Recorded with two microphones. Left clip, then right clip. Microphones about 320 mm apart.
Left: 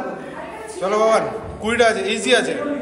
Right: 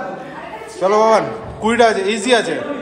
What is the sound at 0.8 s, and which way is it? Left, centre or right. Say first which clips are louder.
A man's voice: right 4 dB; centre.